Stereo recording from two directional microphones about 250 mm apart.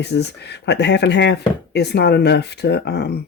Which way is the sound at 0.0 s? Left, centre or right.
Left.